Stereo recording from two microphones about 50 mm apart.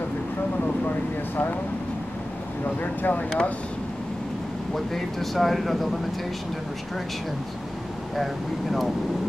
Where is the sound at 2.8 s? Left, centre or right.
Left.